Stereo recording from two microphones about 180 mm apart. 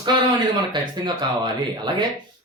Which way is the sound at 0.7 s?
25° right (ahead or behind).